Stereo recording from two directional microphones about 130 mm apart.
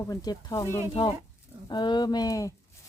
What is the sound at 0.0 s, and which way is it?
Speech, 30° left (ahead or behind).